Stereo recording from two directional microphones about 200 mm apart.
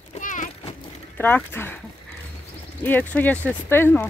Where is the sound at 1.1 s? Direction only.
10° left (ahead or behind).